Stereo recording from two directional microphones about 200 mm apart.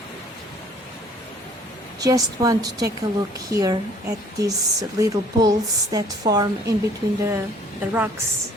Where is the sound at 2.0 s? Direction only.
20° right (ahead or behind).